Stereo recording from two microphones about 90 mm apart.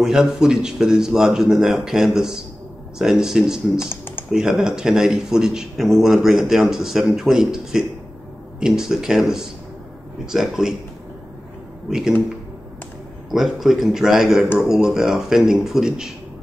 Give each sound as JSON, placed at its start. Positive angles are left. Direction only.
{"t": 0.0, "sound": "a man's voice", "side_deg": -5}
{"t": 3.9, "sound": "typing", "side_deg": 25}
{"t": 4.3, "sound": "a man's voice", "side_deg": -5}
{"t": 11.9, "sound": "a man's voice", "side_deg": -5}
{"t": 13.3, "sound": "a man's voice", "side_deg": -5}